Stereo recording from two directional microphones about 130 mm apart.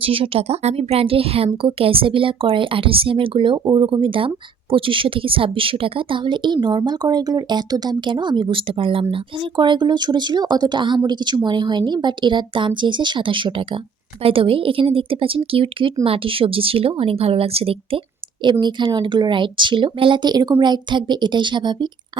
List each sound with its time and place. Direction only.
0.0 s a woman's voice: 45° right (ahead or behind)
18.6 s a woman's voice: 35° right (ahead or behind)